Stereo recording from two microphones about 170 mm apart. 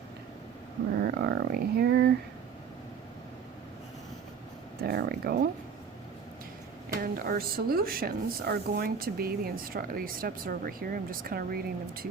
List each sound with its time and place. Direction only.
0.9 s a sound: 65° right (ahead or behind)
4.8 s speech: 65° right (ahead or behind)
7.0 s speech: 60° right (ahead or behind)